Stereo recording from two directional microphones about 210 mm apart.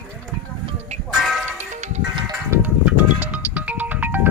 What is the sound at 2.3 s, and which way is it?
Music, 10° right (ahead or behind).